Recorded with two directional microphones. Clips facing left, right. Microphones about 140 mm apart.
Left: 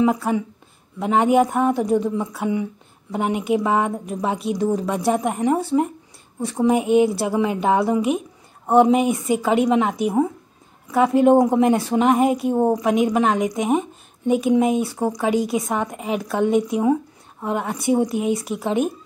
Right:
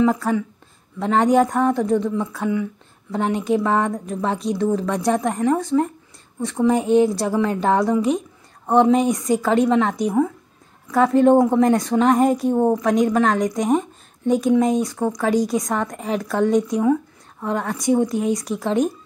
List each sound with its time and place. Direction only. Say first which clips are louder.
0.0 s a woman's voice: right 1 dB; 15° left (ahead or behind)
2.4 s a sound: right 1 dB; 20° left (ahead or behind)
3.2 s a woman's voice: right 1 dB; 10° left (ahead or behind)